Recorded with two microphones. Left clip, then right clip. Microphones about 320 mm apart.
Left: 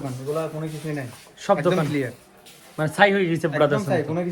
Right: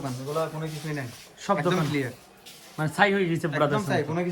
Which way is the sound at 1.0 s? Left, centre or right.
Centre.